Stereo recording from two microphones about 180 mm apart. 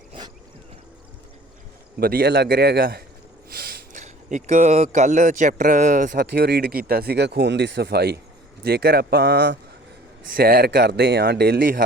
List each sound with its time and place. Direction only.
2.0 s speech: 55° right (ahead or behind)